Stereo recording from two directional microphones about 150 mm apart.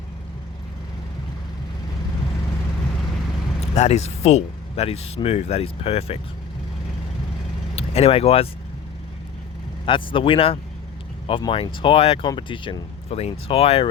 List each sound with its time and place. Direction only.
3.6 s speech: 45° left (ahead or behind)
7.8 s speech: 40° left (ahead or behind)
9.8 s speech: 35° left (ahead or behind)